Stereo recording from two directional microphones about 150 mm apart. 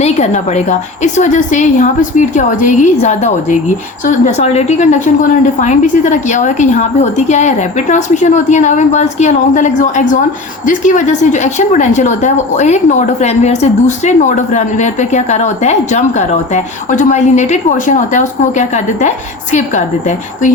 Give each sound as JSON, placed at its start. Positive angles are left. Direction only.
{"t": 0.0, "sound": "a woman's voice", "side_deg": 45}